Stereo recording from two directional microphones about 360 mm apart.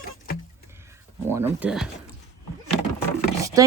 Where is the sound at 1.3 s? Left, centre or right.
Centre.